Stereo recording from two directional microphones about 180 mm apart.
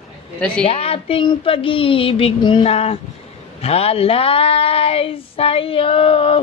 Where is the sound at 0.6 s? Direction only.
35° left (ahead or behind).